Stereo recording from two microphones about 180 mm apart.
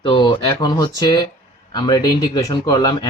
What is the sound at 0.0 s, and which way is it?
Speech, 25° left (ahead or behind).